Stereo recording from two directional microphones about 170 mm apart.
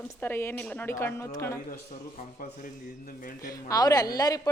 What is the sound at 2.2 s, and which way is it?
Speech, 50° left (ahead or behind).